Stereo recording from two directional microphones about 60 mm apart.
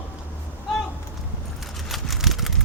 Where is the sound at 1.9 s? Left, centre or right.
Centre.